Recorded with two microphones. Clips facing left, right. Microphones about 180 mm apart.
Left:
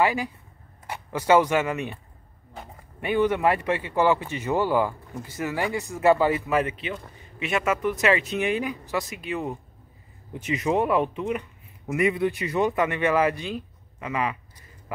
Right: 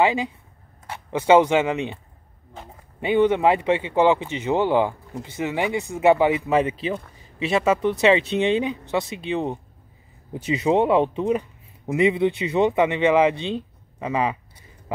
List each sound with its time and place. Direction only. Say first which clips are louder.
0.0 s speech: right 3 dB; 20° right (ahead or behind)
3.0 s speech: right 4 dB; 25° right (ahead or behind)